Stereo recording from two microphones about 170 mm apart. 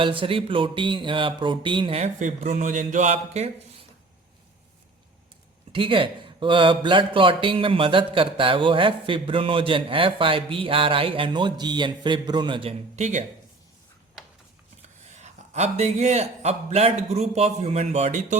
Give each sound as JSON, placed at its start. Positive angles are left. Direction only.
{"t": 0.0, "sound": "mantra", "side_deg": -30}
{"t": 2.1, "sound": "speech", "side_deg": -50}
{"t": 5.7, "sound": "a man's voice", "side_deg": -30}
{"t": 13.0, "sound": "speech", "side_deg": -45}
{"t": 15.2, "sound": "a man's voice", "side_deg": -40}